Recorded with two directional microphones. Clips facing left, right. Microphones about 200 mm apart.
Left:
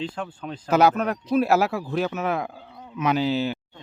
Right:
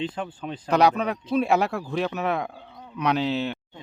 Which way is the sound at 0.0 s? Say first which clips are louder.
Right 1 dB; 5° right (ahead or behind).